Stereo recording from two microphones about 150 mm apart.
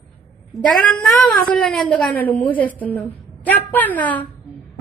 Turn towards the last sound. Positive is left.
turn(degrees=10)  # may be behind; listen again after turning